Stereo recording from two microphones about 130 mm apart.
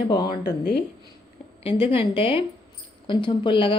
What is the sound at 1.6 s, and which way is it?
A woman's voice, 45° left (ahead or behind).